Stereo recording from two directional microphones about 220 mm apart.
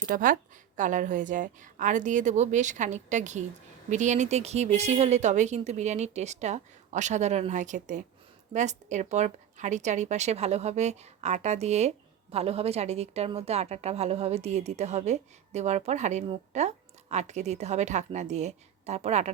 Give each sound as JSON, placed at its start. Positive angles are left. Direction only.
{"t": 0.0, "sound": "speech", "side_deg": -40}